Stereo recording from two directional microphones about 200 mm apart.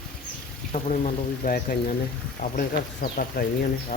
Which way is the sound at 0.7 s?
35° left (ahead or behind).